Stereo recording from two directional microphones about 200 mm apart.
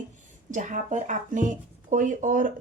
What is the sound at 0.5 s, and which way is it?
Speech, 40° right (ahead or behind).